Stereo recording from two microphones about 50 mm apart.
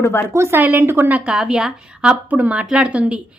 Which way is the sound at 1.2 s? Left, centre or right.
Centre.